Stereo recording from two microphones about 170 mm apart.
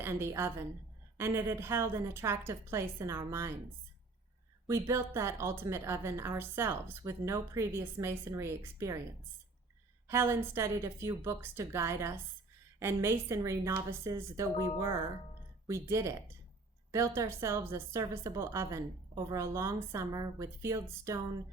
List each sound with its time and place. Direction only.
0.0 s a woman's voice: 15° right (ahead or behind)
4.6 s a woman's voice: 15° right (ahead or behind)
10.1 s a woman's voice: 15° right (ahead or behind)
17.2 s a woman's voice: 15° right (ahead or behind)